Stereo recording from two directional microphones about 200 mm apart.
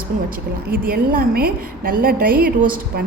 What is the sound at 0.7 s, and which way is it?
A woman's voice, 45° right (ahead or behind).